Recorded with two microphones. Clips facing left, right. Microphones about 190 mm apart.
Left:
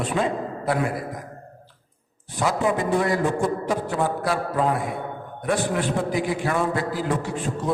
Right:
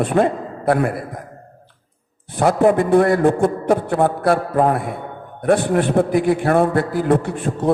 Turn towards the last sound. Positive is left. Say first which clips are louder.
# right 6 dB
turn(degrees=-55)  # may be behind; listen again after turning